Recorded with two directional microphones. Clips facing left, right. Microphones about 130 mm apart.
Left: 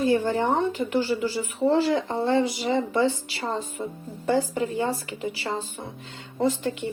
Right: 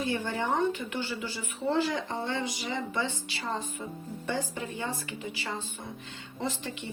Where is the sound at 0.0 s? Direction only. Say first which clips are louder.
Left 9 dB; 35° left (ahead or behind).